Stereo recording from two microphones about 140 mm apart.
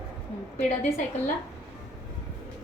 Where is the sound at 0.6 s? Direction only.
55° left (ahead or behind).